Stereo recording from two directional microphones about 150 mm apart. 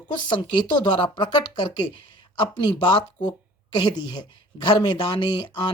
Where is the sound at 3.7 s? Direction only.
25° left (ahead or behind).